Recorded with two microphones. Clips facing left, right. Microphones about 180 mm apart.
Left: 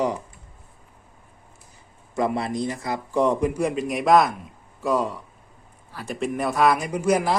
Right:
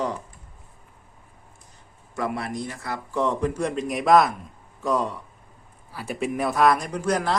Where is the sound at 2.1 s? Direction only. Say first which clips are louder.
Left 4 dB; 20° left (ahead or behind).